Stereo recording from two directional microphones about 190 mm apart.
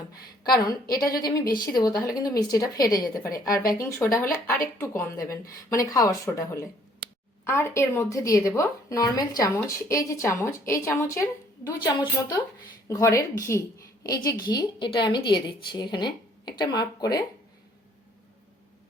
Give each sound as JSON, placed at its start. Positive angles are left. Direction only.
{"t": 0.4, "sound": "a woman's voice", "side_deg": 20}